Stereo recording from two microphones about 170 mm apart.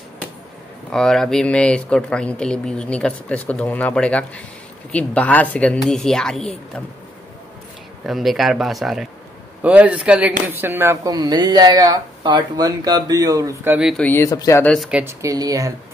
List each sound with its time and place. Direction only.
0.9 s speech: 5° left (ahead or behind)
8.1 s a man's voice: centre (ahead or behind); by 13.7 s 20° right (ahead or behind)
13.7 s speech: 5° right (ahead or behind)
14.0 s speech: 15° left (ahead or behind)
14.6 s speech: centre (ahead or behind)
15.2 s speech: 20° right (ahead or behind)